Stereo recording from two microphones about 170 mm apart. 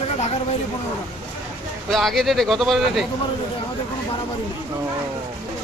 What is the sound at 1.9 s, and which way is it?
Speech, centre (ahead or behind).